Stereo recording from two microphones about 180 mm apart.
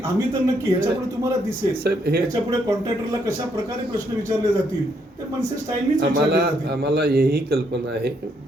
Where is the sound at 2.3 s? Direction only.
20° right (ahead or behind).